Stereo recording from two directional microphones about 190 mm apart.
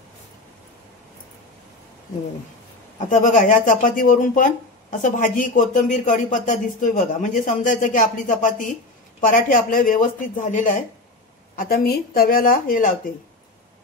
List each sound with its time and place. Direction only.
3.1 s speech: 40° left (ahead or behind)